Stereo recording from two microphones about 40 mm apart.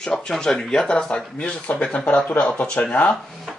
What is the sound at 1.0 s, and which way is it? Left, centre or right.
Speech, left.